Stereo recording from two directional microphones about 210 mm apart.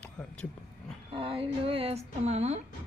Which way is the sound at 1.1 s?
25° right (ahead or behind).